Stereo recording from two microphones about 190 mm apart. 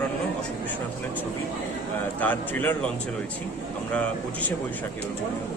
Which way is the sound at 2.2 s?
10° left (ahead or behind).